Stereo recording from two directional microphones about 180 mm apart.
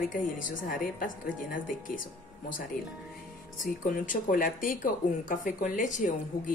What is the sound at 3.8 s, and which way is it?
A woman's voice, 50° left (ahead or behind).